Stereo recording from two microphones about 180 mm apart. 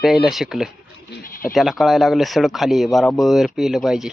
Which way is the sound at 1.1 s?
55° left (ahead or behind).